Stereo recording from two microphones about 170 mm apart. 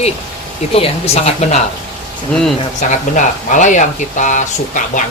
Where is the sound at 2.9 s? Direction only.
45° left (ahead or behind).